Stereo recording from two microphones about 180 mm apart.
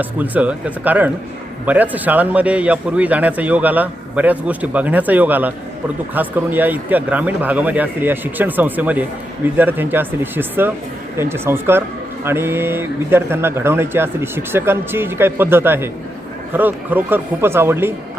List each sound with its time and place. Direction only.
0.0 s a man's voice: 10° right (ahead or behind)